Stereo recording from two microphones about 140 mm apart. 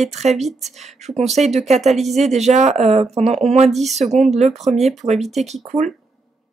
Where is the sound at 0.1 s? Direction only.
50° right (ahead or behind).